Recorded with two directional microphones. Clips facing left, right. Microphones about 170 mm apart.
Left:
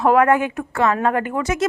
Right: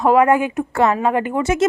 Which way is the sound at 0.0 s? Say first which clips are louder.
Right 1 dB; 10° right (ahead or behind).